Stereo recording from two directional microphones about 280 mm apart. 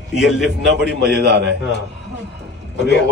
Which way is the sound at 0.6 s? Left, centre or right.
Right.